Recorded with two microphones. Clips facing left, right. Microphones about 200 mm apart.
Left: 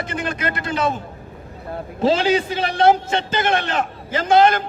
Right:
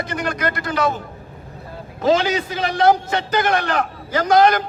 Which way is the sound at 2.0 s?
30° left (ahead or behind).